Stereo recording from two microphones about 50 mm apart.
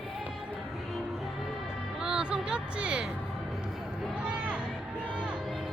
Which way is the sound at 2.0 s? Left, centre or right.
Centre.